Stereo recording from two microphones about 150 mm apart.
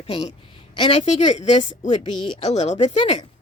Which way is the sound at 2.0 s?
35° left (ahead or behind).